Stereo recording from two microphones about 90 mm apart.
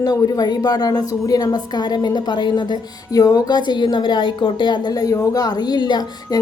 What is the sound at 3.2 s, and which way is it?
A woman's voice, 45° left (ahead or behind).